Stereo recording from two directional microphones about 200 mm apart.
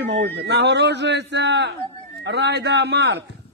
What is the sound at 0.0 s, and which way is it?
A man's voice, 60° right (ahead or behind).